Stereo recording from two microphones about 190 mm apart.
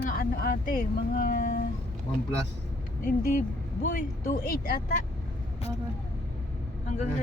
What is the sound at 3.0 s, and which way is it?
Speech, 50° left (ahead or behind).